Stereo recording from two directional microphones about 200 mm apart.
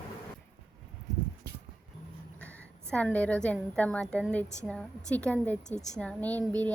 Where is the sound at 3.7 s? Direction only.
5° left (ahead or behind).